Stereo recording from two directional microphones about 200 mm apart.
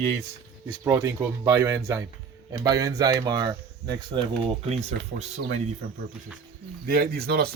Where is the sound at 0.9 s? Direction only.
20° right (ahead or behind); by 5.4 s 35° right (ahead or behind).